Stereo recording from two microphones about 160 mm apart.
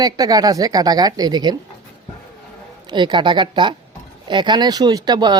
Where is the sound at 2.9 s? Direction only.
30° right (ahead or behind).